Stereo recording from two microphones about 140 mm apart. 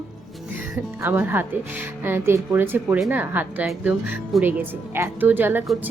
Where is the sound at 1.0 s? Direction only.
15° right (ahead or behind).